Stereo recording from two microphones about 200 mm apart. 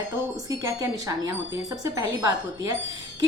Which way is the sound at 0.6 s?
15° right (ahead or behind).